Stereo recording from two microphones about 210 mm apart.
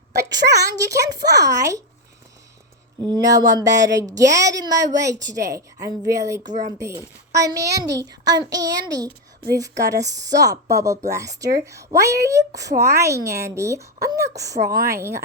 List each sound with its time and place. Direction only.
0.5 s a woman's voice: 15° right (ahead or behind)
3.1 s a woman's voice: 20° right (ahead or behind)
6.4 s speech: 35° right (ahead or behind)
6.7 s a woman's voice: 15° right (ahead or behind)